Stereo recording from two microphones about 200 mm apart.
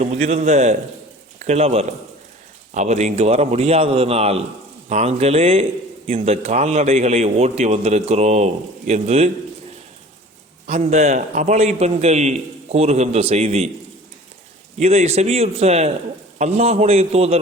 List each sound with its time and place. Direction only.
0.0 s a man's voice: 35° right (ahead or behind)
10.7 s a man's voice: 35° right (ahead or behind)
14.8 s a man's voice: 30° right (ahead or behind)